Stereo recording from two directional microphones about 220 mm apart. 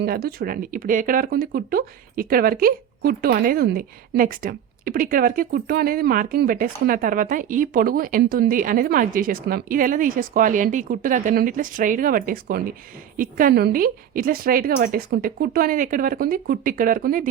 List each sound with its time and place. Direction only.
0.0 s speech: 45° right (ahead or behind)